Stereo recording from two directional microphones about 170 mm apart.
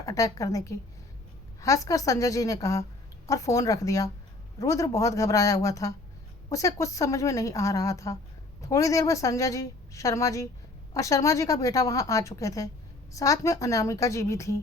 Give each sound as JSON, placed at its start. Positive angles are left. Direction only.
{"t": 0.0, "sound": "a woman's voice", "side_deg": 20}